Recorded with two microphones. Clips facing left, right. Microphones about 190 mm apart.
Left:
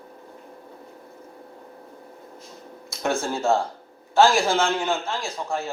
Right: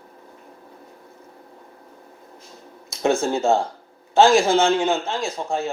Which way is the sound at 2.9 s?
20° right (ahead or behind).